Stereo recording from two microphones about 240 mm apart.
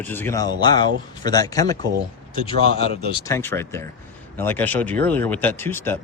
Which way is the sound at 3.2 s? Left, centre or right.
Centre.